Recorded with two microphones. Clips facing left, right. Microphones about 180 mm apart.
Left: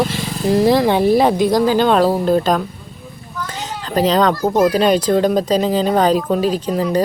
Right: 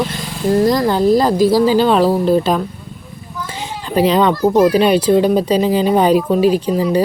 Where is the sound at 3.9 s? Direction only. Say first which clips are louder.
Right 2 dB; 10° right (ahead or behind).